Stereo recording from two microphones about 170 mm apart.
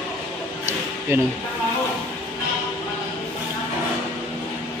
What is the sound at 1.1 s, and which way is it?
Speech, 15° right (ahead or behind).